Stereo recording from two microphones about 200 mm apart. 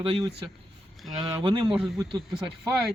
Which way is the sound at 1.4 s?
25° right (ahead or behind).